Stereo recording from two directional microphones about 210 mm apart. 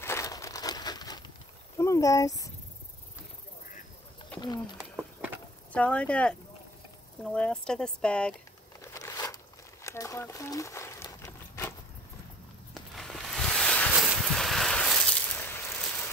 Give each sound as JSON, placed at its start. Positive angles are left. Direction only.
{"t": 0.0, "sound": "crumpling", "side_deg": 15}
{"t": 1.8, "sound": "speech", "side_deg": 15}
{"t": 4.4, "sound": "speech", "side_deg": 20}
{"t": 5.7, "sound": "speech", "side_deg": 5}
{"t": 7.3, "sound": "speech", "side_deg": 5}
{"t": 8.9, "sound": "crumpling", "side_deg": 15}
{"t": 12.7, "sound": "a sound", "side_deg": 0}